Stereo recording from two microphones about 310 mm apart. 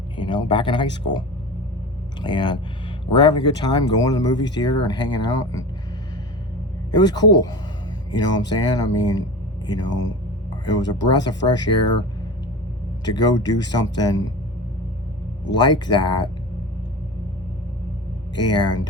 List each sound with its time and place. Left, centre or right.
0.2 s speech: centre
2.2 s speech: centre
6.9 s speech: centre
13.1 s speech: centre
15.5 s speech: centre
18.3 s speech: centre